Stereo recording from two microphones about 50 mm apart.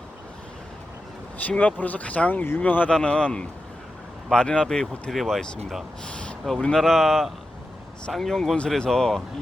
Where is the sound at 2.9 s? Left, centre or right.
Centre.